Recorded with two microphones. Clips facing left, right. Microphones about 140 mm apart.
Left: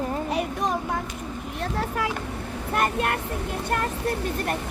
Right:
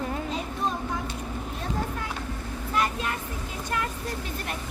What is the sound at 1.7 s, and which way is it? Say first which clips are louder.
Vehicle: left 6 dB; 80° left.